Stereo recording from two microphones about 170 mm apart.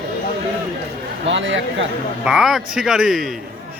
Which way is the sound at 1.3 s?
90° right.